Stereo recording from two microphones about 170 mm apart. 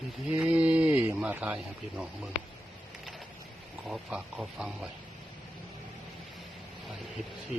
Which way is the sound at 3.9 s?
Centre (ahead or behind).